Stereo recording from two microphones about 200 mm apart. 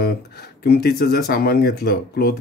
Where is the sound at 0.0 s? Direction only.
50° left (ahead or behind).